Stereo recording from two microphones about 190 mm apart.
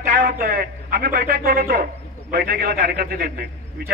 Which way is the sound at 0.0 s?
50° right (ahead or behind).